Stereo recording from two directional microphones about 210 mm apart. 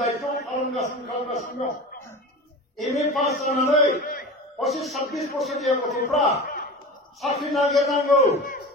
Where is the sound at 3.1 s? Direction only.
Centre (ahead or behind).